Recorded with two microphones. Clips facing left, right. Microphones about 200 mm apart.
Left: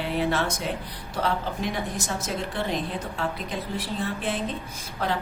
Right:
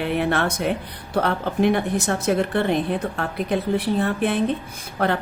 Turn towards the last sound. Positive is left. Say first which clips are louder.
# right 6 dB
turn(degrees=-60)  # may be behind; listen again after turning